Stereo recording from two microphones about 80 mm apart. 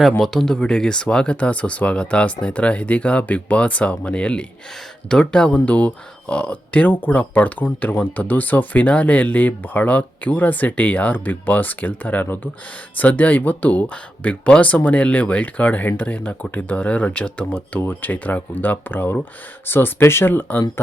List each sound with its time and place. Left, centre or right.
0.2 s speech: centre; by 20.7 s left